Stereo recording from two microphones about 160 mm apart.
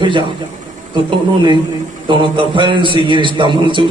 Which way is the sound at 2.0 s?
30° right (ahead or behind).